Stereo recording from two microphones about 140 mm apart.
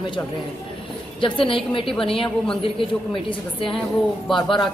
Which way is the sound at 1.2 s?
40° left (ahead or behind).